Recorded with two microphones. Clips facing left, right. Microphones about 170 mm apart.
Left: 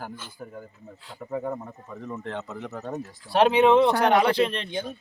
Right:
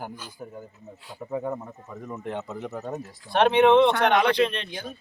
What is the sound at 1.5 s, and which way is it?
Speech, 5° right (ahead or behind).